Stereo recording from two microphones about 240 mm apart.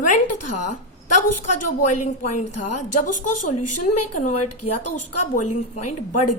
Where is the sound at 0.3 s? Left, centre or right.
Left.